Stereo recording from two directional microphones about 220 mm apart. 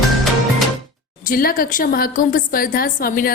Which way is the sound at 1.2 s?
40° left (ahead or behind).